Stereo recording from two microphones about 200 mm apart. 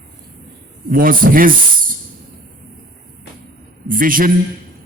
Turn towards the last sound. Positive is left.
turn(degrees=-45)  # may be behind; listen again after turning